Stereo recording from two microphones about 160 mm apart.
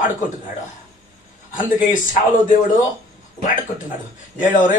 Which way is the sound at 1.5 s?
55° left (ahead or behind).